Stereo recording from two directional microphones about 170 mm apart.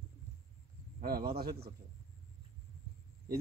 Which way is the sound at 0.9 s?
65° right (ahead or behind).